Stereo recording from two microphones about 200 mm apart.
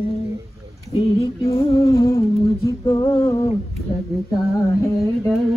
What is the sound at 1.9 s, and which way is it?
Humming, 15° left (ahead or behind).